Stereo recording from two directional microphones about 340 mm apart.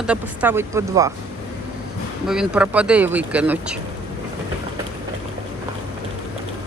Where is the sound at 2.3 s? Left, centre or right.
Centre.